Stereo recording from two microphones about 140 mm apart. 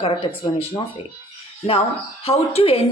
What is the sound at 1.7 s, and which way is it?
Speech, 45° left (ahead or behind).